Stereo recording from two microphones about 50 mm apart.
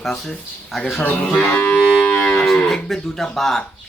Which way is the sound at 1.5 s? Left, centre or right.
Left.